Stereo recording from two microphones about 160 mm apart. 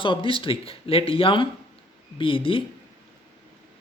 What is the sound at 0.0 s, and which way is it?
Speech, 30° left (ahead or behind).